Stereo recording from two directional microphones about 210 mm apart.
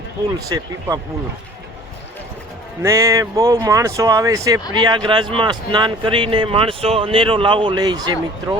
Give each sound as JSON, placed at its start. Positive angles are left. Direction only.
{"t": 0.3, "sound": "speech", "side_deg": -15}
{"t": 2.8, "sound": "a man's voice", "side_deg": -15}